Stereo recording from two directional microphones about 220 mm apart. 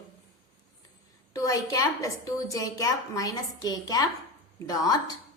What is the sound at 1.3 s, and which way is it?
A woman's voice, 15° left (ahead or behind).